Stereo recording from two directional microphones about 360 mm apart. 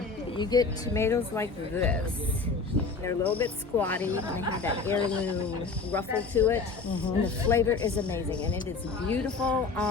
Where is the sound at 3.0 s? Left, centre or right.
Centre.